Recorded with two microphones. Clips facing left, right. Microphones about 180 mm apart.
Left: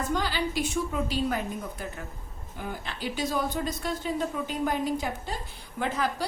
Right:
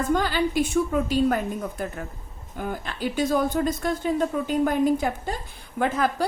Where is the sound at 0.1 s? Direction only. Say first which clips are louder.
Right 6 dB; 50° right (ahead or behind).